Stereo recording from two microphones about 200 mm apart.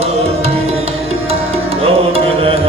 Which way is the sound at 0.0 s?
30° right (ahead or behind).